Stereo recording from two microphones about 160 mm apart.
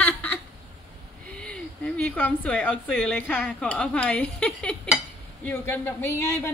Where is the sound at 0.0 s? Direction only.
10° left (ahead or behind).